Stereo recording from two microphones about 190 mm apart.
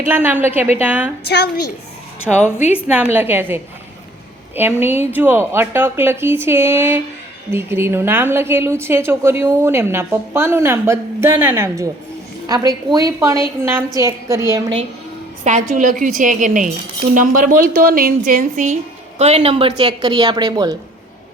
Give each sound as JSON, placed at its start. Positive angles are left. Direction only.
{"t": 0.0, "sound": "a woman's voice", "side_deg": -10}
{"t": 1.2, "sound": "a woman's voice", "side_deg": 60}
{"t": 2.3, "sound": "a woman's voice", "side_deg": -5}
{"t": 15.7, "sound": "a woman's voice", "side_deg": -45}